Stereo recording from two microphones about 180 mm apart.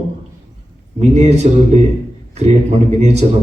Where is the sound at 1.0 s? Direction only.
40° right (ahead or behind).